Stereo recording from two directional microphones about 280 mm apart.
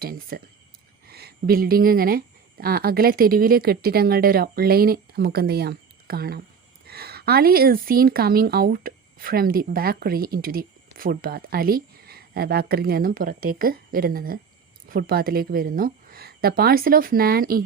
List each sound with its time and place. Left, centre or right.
0.0 s speech: right